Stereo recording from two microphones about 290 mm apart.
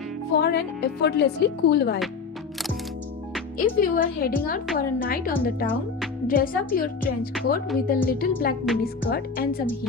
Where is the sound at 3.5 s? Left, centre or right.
Left.